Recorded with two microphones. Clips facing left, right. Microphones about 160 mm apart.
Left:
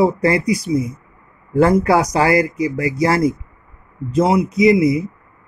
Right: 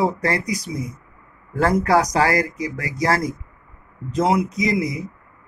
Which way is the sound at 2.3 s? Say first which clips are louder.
Left 6 dB; 40° right (ahead or behind).